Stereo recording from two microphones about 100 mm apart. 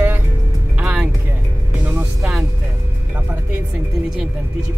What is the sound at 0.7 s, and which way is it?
Music, 15° right (ahead or behind).